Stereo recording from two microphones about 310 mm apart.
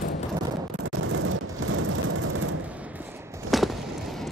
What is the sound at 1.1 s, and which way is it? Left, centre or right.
Vehicle, right.